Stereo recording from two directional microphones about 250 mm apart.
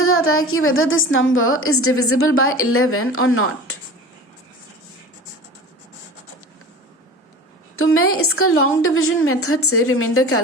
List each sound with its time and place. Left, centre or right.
0.0 s a woman's voice: left
7.8 s a woman's voice: left